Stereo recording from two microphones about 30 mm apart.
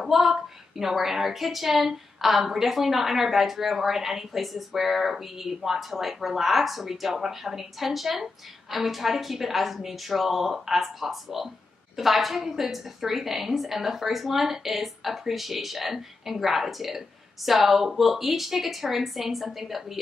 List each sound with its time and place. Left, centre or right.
0.0 s a woman's voice: centre